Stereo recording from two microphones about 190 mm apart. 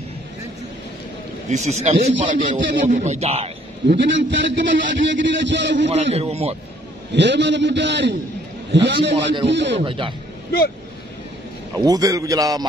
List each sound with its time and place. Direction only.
1.5 s speech: 35° right (ahead or behind)
3.9 s a man's voice: 70° right (ahead or behind)
5.9 s speech: 35° right (ahead or behind)
7.2 s a man's voice: 65° right (ahead or behind)
9.1 s a man's voice: 30° right (ahead or behind)
9.5 s a man's voice: 70° right (ahead or behind)
9.8 s a man's voice: 25° right (ahead or behind)
11.7 s a man's voice: 20° right (ahead or behind)